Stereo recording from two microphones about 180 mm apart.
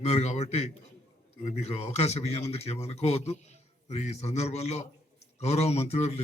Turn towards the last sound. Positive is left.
turn(degrees=35)  # may be behind; listen again after turning